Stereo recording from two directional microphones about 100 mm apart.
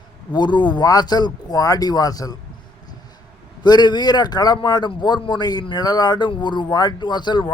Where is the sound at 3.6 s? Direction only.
45° left (ahead or behind).